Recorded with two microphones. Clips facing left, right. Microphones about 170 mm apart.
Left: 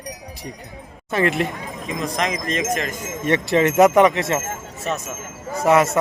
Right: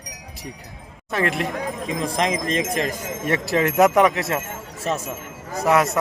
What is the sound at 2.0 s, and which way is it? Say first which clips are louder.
Speech: right 1 dB; 30° right (ahead or behind).